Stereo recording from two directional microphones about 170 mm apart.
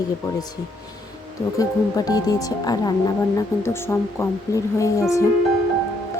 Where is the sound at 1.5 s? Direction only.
20° left (ahead or behind).